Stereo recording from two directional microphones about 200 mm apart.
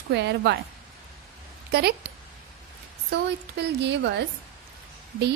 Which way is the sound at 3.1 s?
60° right (ahead or behind).